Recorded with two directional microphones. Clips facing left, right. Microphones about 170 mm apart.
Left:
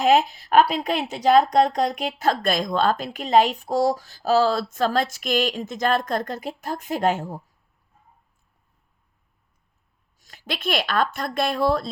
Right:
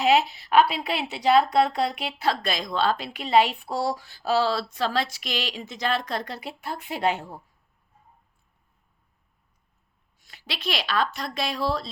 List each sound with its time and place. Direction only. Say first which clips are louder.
0.0 s speech: left 3 dB; 50° left (ahead or behind)
10.2 s speech: left 6 dB; 45° left (ahead or behind)